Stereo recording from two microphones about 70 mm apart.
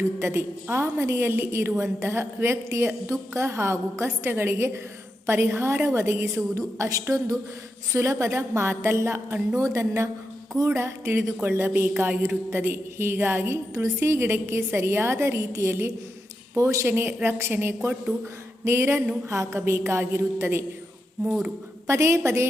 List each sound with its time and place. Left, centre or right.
0.2 s a woman's voice: right
9.6 s a woman's voice: right
12.5 s a woman's voice: right
13.7 s a woman's voice: right
21.8 s a woman's voice: right